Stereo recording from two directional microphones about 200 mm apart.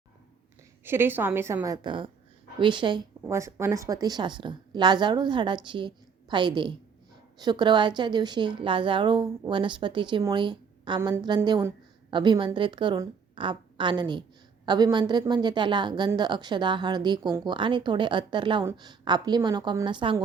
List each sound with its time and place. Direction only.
0.9 s a woman's voice: 10° right (ahead or behind)